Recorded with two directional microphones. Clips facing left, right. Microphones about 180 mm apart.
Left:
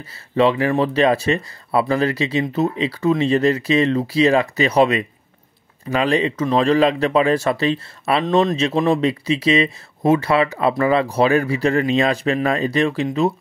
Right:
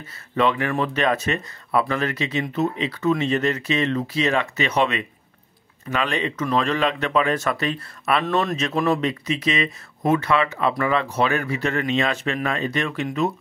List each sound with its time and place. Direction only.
0.0 s speech: 30° left (ahead or behind)